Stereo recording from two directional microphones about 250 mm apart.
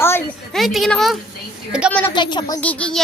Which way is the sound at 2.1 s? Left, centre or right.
Centre.